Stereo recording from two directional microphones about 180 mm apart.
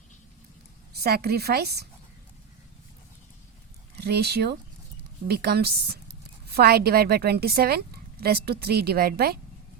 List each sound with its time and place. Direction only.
0.9 s speech: 60° right (ahead or behind)
3.9 s speech: 60° right (ahead or behind)